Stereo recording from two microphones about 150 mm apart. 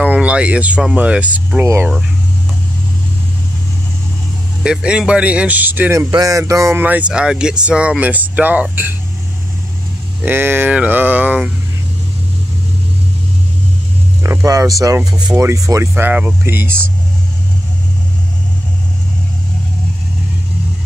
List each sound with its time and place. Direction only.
0.0 s speech: 10° right (ahead or behind)
4.6 s speech: 5° right (ahead or behind)
10.2 s speech: 15° right (ahead or behind)
14.2 s speech: 20° right (ahead or behind)